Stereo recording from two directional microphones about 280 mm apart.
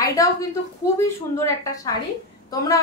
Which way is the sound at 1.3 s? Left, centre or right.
Centre.